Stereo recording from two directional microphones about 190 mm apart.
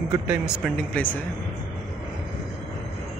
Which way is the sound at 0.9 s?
10° left (ahead or behind).